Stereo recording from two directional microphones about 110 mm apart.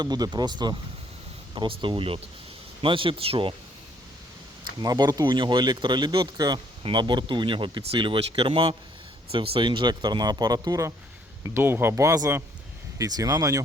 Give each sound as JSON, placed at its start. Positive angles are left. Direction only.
{"t": 0.0, "sound": "speech", "side_deg": -40}
{"t": 4.8, "sound": "speech", "side_deg": -40}
{"t": 11.4, "sound": "speech", "side_deg": -20}